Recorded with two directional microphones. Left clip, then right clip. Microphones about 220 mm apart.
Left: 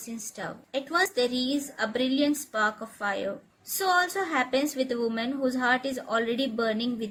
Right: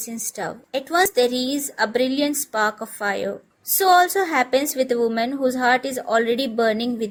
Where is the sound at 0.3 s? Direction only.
40° right (ahead or behind).